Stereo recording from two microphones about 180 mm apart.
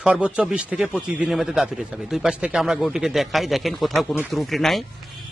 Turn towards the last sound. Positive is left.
turn(degrees=0)  # may be behind; listen again after turning